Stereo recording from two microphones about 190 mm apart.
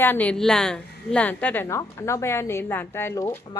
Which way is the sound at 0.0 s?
10° left (ahead or behind).